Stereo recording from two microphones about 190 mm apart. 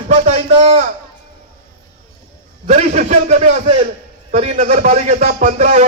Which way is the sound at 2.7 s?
35° right (ahead or behind).